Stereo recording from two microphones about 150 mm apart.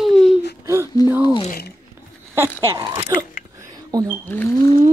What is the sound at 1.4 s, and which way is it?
Speech, 90° left.